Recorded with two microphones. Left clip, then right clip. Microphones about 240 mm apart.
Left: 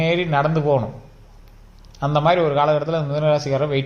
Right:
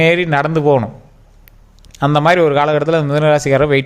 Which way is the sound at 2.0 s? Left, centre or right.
Right.